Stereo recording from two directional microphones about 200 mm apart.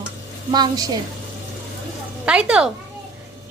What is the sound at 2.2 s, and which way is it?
Speech, 5° right (ahead or behind).